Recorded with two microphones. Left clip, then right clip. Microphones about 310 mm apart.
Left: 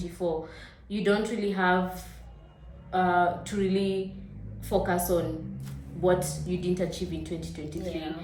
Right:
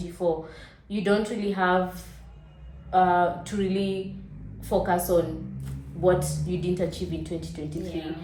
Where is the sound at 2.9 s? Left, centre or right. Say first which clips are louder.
Right 3 dB; centre.